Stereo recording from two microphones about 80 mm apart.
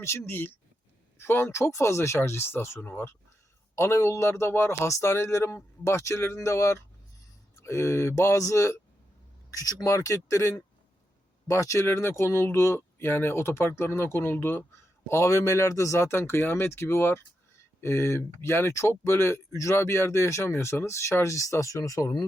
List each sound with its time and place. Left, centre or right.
0.0 s speech: left